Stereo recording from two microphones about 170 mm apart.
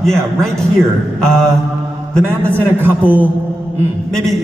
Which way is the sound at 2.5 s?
10° right (ahead or behind).